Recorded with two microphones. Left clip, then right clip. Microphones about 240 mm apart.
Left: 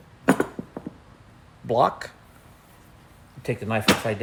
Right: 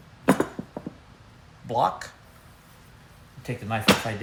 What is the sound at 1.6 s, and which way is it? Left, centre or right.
Speech, left.